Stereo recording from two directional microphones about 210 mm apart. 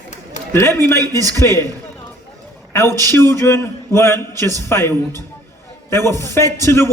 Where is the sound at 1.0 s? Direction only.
15° right (ahead or behind).